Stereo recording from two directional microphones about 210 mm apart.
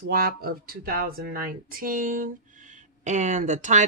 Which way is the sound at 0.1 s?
45° right (ahead or behind).